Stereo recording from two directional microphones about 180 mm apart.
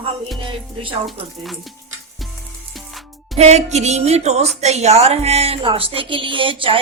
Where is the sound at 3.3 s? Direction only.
35° right (ahead or behind).